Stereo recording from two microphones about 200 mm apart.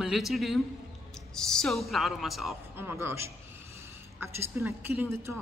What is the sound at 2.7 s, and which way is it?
Speech, 10° right (ahead or behind).